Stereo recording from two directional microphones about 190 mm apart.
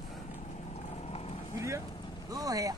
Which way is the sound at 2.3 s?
20° right (ahead or behind).